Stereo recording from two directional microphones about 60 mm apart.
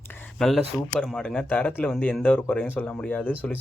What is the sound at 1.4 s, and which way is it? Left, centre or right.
Speech, left.